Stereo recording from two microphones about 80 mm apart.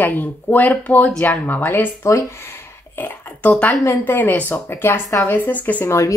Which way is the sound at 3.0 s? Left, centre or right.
Centre.